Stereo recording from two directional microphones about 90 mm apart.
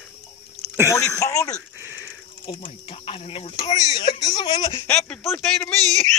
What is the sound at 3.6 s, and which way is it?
Speech, 45° left (ahead or behind).